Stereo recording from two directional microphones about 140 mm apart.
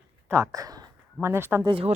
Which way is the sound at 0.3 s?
20° right (ahead or behind).